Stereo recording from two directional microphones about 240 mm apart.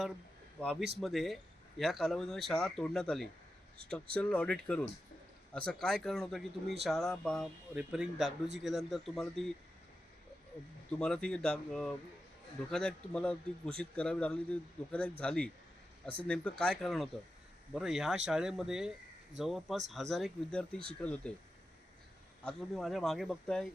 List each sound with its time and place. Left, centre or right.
0.6 s a man's voice: centre
11.0 s a man's voice: centre
22.4 s a man's voice: centre